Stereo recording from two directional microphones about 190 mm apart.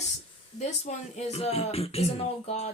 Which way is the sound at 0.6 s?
35° left (ahead or behind).